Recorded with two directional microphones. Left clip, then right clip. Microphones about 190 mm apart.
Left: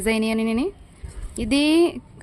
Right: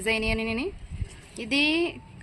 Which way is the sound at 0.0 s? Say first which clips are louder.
Left 3 dB; 60° left (ahead or behind).